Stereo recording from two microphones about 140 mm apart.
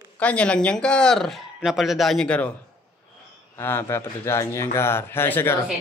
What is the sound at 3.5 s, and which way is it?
Speech, 15° left (ahead or behind).